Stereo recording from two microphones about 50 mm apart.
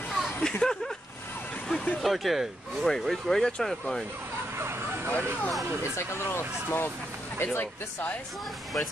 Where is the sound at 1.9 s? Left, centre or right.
Centre.